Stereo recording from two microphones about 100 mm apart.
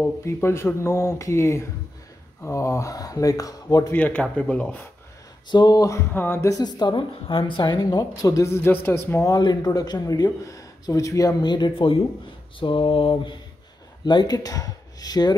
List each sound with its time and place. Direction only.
0.2 s speech: 25° left (ahead or behind)
3.9 s speech: 15° left (ahead or behind)
5.5 s speech: 45° left (ahead or behind)
6.1 s speech: 20° left (ahead or behind)
6.6 s a woman's voice: 45° left (ahead or behind); by 9.3 s 25° left (ahead or behind)
9.3 s a woman's voice: 45° left (ahead or behind)
12.5 s mantra: 60° left (ahead or behind)
14.0 s speech: 45° left (ahead or behind)